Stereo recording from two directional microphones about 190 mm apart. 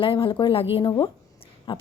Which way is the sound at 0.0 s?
30° left (ahead or behind).